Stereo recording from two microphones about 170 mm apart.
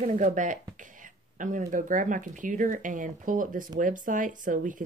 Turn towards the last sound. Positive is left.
turn(degrees=-50)  # may be behind; listen again after turning